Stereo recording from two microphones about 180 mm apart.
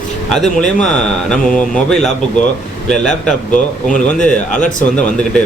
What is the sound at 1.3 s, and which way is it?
Speech, 5° left (ahead or behind).